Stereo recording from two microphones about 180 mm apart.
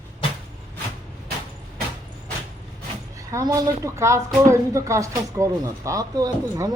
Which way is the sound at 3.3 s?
20° right (ahead or behind).